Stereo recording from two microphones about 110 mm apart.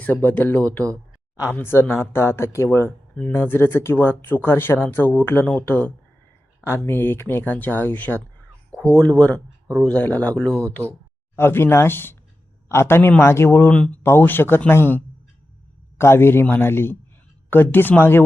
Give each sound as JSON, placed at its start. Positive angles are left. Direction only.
{"t": 0.0, "sound": "speech", "side_deg": 15}
{"t": 13.7, "sound": "speech", "side_deg": 10}